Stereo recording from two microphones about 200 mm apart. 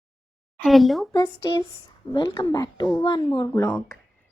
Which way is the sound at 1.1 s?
20° left (ahead or behind).